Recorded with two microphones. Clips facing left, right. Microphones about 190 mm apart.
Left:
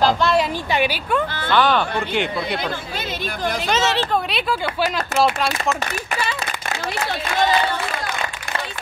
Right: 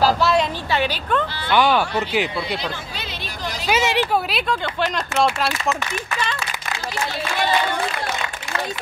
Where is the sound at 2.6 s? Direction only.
55° left (ahead or behind).